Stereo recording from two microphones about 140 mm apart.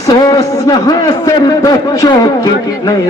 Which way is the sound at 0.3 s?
25° left (ahead or behind).